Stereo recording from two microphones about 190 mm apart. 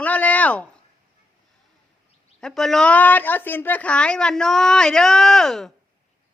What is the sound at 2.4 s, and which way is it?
Speech, centre (ahead or behind).